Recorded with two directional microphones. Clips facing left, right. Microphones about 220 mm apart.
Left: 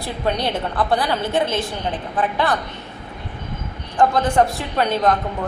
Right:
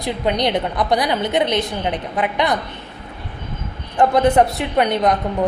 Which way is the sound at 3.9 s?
20° right (ahead or behind).